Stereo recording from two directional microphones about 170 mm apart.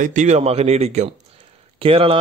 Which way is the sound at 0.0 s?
45° right (ahead or behind).